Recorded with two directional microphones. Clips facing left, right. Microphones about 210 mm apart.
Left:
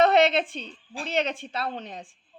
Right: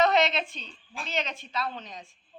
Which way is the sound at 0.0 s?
55° left (ahead or behind).